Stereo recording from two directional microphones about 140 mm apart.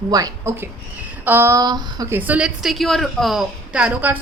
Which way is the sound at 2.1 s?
10° right (ahead or behind).